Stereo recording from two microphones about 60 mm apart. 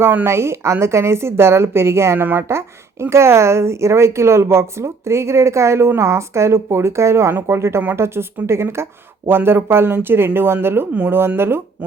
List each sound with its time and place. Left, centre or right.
0.0 s speech: right
0.3 s a woman's voice: right